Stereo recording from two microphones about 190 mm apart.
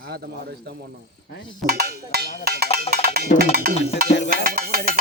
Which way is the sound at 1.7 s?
55° right (ahead or behind).